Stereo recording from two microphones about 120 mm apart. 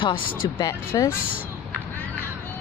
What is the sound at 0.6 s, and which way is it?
Speech, 25° left (ahead or behind).